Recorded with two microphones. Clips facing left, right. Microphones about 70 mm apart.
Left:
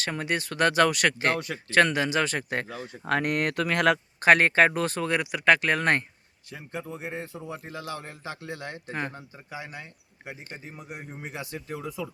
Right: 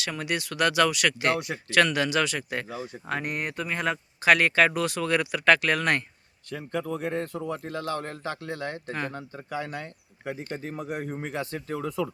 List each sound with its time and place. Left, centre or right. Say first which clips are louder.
0.0 s speech: left 1 dB; left
2.3 s speech: left 1 dB; left
3.1 s speech: left 6 dB; left
4.2 s speech: left 1 dB; left
5.1 s speech: right 1 dB; centre
6.5 s a man's voice: right 6 dB; right
8.9 s speech: left 2 dB; left
9.1 s a man's voice: right 6 dB; right